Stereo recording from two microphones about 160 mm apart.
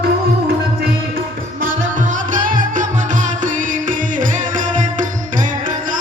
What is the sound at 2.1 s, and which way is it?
Music, 55° right (ahead or behind).